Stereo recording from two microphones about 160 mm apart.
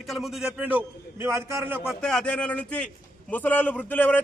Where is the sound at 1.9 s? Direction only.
5° left (ahead or behind).